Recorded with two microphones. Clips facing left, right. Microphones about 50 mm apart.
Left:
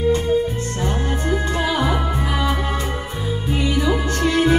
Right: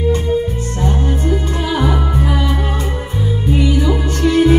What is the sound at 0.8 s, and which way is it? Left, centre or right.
Music, left.